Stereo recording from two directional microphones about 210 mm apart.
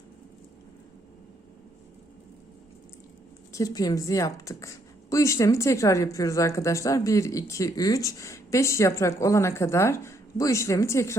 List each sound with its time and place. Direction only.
3.5 s a woman's voice: 15° left (ahead or behind)